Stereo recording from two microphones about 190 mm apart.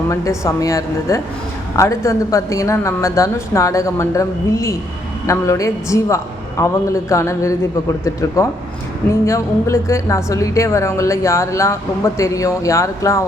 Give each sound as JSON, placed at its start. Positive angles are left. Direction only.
{"t": 0.1, "sound": "a woman's voice", "side_deg": 15}